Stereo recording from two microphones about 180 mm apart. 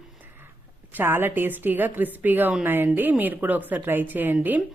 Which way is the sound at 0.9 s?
10° right (ahead or behind).